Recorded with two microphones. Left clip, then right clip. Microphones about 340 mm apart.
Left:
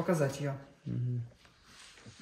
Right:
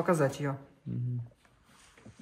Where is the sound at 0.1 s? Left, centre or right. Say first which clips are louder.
Right 3 dB; centre.